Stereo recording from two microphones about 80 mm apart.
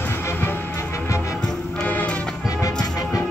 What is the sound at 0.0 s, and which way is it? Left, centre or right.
Music, left.